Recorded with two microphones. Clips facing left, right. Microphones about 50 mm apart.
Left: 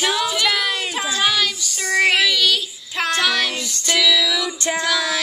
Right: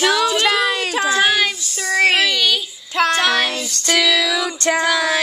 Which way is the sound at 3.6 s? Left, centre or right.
Right.